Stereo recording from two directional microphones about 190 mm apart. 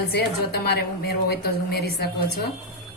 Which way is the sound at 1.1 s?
55° left (ahead or behind).